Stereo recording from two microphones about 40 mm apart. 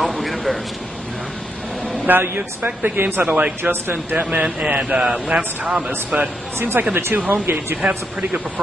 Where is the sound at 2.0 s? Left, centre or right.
Right.